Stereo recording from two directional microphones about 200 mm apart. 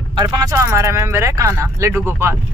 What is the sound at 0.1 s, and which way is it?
Speech, 20° right (ahead or behind).